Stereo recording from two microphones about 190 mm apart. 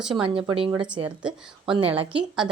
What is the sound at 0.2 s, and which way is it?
Speech, 25° right (ahead or behind).